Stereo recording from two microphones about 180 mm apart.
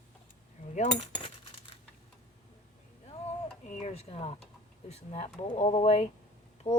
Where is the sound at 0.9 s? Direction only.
25° left (ahead or behind).